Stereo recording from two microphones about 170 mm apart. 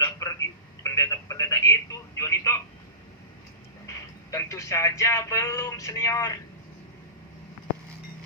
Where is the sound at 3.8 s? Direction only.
20° left (ahead or behind).